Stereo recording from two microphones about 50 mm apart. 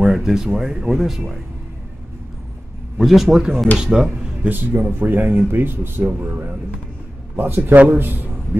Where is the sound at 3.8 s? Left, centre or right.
Centre.